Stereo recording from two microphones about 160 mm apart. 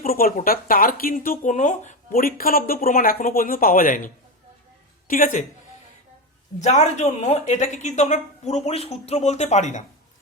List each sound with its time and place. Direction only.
0.0 s speech: 65° left (ahead or behind)
1.5 s speech: 50° left (ahead or behind)
6.6 s speech: 50° left (ahead or behind)